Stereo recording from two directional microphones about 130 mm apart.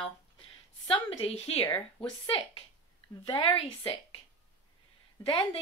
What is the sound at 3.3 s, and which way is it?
Speech, 40° left (ahead or behind).